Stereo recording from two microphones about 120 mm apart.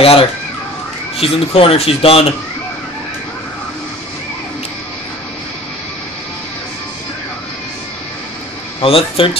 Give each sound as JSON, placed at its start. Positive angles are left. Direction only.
{"t": 0.0, "sound": "speech", "side_deg": 50}
{"t": 8.8, "sound": "speech", "side_deg": 50}